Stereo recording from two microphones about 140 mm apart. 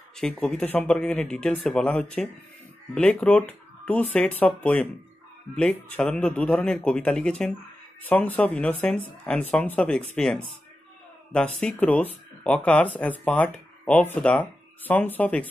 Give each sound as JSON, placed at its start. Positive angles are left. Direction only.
{"t": 0.1, "sound": "speech", "side_deg": 5}